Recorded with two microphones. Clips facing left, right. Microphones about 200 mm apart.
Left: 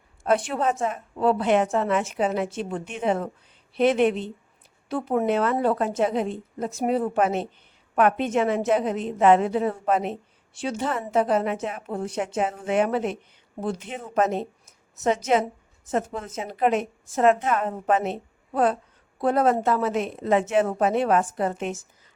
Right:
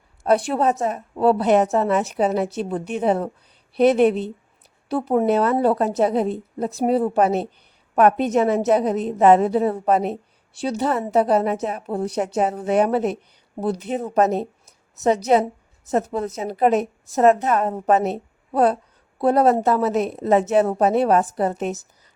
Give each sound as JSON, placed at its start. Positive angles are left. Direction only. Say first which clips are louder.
{"t": 0.2, "sound": "a woman's voice", "louder": "right 4 dB", "side_deg": -35}